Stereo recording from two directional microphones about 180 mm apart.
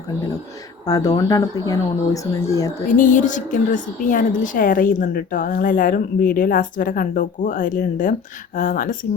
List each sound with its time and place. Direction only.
0.9 s speech: 20° left (ahead or behind)
2.9 s a woman's voice: 45° left (ahead or behind)